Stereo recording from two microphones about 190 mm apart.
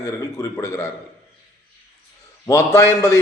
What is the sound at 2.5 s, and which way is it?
Speech, 15° left (ahead or behind).